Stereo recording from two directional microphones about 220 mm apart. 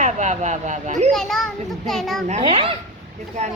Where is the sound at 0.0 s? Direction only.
35° right (ahead or behind).